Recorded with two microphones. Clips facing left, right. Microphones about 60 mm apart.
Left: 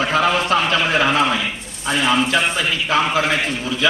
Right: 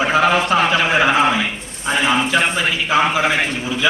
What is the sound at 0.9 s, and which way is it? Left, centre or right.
A man's voice, centre.